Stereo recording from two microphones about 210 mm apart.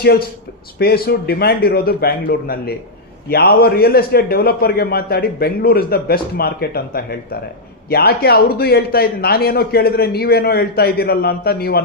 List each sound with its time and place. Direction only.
0.8 s a man's voice: 45° left (ahead or behind)